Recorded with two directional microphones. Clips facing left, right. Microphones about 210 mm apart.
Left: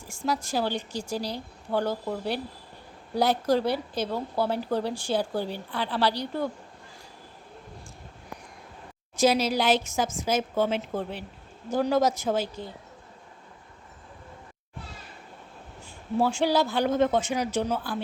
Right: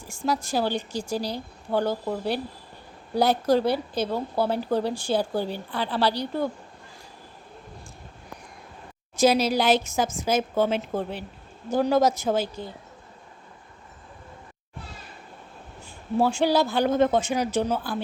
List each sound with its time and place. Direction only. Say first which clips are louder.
0.1 s speech: right 2 dB; 35° right (ahead or behind)
9.1 s speech: right 2 dB; 40° right (ahead or behind)
16.1 s speech: right 2 dB; 35° right (ahead or behind)